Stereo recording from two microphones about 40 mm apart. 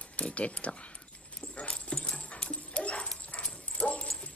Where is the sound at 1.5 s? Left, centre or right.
Left.